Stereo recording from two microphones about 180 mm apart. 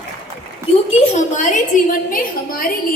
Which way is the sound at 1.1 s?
40° left (ahead or behind).